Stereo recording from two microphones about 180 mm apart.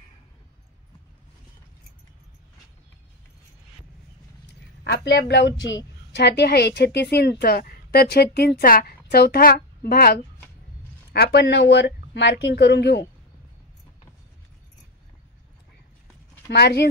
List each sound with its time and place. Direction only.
4.8 s a woman's voice: 65° left (ahead or behind)
11.1 s speech: 70° left (ahead or behind)
16.4 s a woman's voice: 65° left (ahead or behind)